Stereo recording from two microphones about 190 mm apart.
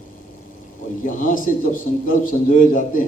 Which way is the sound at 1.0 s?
45° left (ahead or behind).